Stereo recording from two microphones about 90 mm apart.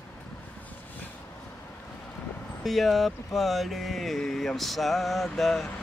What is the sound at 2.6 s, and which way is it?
Speech, centre (ahead or behind).